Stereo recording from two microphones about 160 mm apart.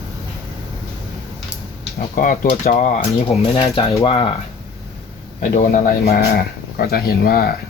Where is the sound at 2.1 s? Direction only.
60° left (ahead or behind).